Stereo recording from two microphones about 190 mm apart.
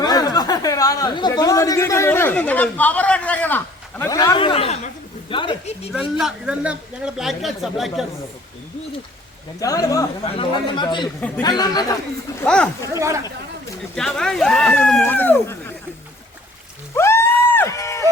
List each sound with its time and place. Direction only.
0.0 s speech: 20° left (ahead or behind)
5.9 s a man's voice: centre (ahead or behind)
9.6 s a man's voice: 20° left (ahead or behind)
10.2 s a man's voice: 30° left (ahead or behind)
13.0 s speech: 15° right (ahead or behind)
13.9 s a man's voice: 5° left (ahead or behind)
16.9 s music: 15° left (ahead or behind)